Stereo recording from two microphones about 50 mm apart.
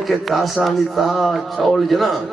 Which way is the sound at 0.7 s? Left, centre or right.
Centre.